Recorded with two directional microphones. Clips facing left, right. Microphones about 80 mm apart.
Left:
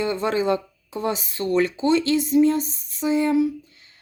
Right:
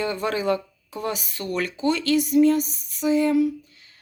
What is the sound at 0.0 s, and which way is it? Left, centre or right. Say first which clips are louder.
Speech: left 2 dB; left.